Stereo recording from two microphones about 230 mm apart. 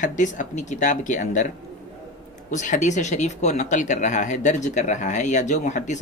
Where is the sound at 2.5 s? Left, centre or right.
Left.